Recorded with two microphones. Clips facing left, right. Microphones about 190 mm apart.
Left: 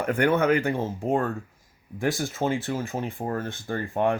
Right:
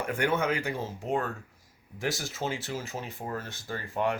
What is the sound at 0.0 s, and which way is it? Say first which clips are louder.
Speech: left 6 dB; 60° left (ahead or behind).